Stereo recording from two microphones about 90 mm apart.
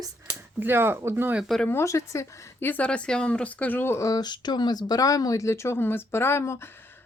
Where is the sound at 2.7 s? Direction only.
15° left (ahead or behind).